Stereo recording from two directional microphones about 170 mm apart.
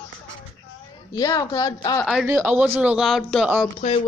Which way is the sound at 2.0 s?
Centre (ahead or behind).